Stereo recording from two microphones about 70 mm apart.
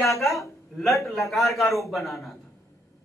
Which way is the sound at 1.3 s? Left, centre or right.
Centre.